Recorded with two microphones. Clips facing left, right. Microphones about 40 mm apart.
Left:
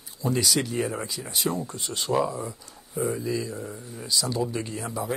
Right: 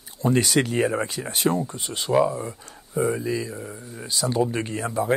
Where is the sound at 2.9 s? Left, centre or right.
Right; by 4.0 s centre.